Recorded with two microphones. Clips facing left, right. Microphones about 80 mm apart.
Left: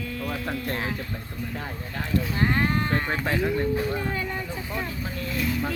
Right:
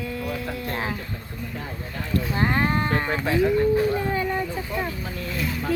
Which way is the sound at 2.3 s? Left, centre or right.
Right.